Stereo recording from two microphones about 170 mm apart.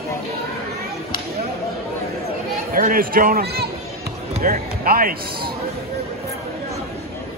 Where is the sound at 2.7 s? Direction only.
55° right (ahead or behind).